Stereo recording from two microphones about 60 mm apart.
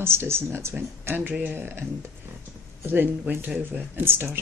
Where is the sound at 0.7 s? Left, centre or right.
Right.